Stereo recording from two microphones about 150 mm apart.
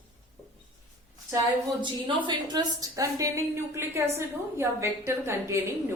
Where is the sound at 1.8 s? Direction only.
30° right (ahead or behind).